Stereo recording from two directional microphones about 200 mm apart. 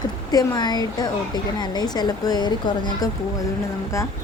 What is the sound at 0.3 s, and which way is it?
Speech, 20° left (ahead or behind).